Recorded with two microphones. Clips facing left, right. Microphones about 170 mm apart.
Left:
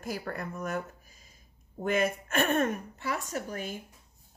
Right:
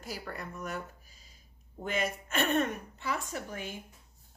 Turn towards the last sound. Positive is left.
turn(degrees=40)  # may be behind; listen again after turning